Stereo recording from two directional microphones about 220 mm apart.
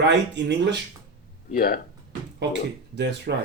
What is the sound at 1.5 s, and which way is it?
Speech, 40° left (ahead or behind).